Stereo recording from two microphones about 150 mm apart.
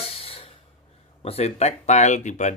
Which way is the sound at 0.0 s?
40° left (ahead or behind).